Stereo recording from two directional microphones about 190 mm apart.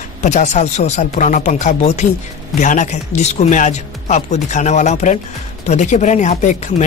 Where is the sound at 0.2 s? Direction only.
40° left (ahead or behind).